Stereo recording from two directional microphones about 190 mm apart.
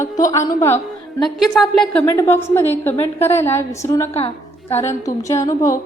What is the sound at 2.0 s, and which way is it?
A woman's voice, 15° left (ahead or behind).